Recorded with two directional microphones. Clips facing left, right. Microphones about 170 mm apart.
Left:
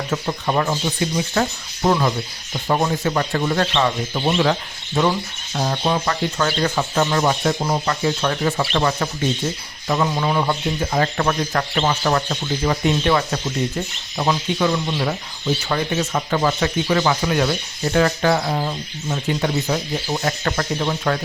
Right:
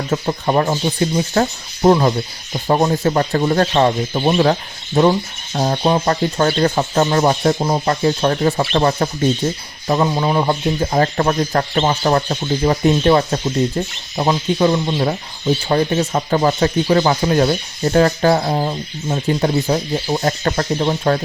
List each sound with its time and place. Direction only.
0.1 s speech: 35° right (ahead or behind)
5.5 s speech: 35° right (ahead or behind)